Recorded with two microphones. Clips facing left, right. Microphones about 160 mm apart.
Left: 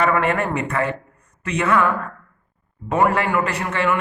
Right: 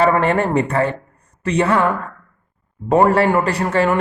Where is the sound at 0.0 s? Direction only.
30° right (ahead or behind).